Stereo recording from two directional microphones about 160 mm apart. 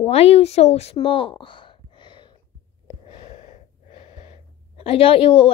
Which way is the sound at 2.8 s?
35° left (ahead or behind).